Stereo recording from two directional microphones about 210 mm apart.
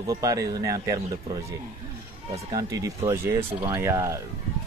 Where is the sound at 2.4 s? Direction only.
15° right (ahead or behind).